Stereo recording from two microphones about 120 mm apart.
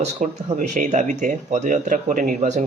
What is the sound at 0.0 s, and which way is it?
Speech, 80° right.